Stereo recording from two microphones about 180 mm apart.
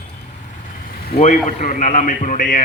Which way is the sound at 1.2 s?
40° left (ahead or behind).